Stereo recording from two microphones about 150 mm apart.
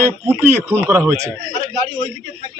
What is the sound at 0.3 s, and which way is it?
Speech, 15° right (ahead or behind).